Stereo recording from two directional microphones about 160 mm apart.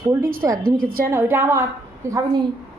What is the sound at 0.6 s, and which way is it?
Speech, 65° right (ahead or behind).